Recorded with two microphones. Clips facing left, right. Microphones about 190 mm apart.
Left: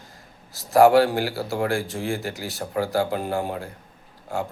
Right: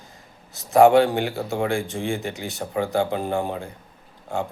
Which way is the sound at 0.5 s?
5° left (ahead or behind).